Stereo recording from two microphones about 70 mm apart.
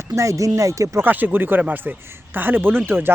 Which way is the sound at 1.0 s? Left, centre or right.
Right.